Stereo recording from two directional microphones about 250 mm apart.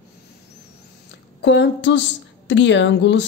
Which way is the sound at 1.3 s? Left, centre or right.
Left.